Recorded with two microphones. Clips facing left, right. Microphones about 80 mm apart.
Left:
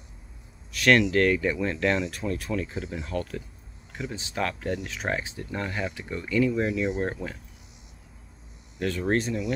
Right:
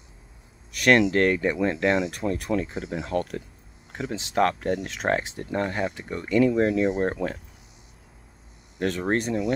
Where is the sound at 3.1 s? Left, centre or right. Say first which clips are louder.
Right 5 dB; right.